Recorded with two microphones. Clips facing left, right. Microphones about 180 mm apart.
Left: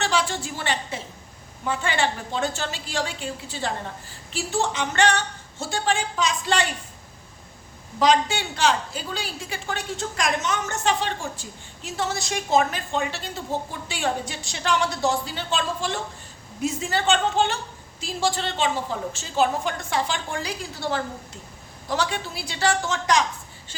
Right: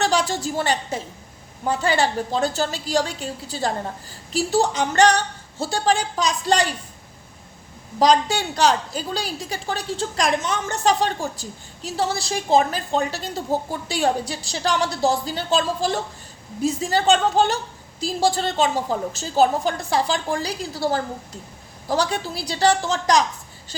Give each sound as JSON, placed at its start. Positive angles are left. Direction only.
{"t": 0.0, "sound": "a woman's voice", "side_deg": -40}
{"t": 7.9, "sound": "a woman's voice", "side_deg": -35}